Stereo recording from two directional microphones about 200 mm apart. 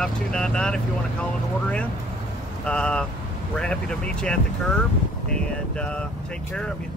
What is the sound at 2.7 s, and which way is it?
Speech, 5° left (ahead or behind).